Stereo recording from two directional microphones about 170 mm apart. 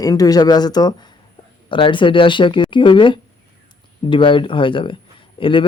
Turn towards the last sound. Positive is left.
turn(degrees=30)  # may be behind; listen again after turning